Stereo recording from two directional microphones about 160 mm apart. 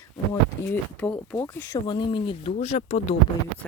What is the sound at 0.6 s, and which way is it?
Speech, 15° left (ahead or behind).